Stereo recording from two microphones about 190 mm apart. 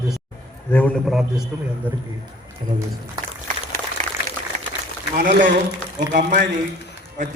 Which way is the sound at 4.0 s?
40° right (ahead or behind).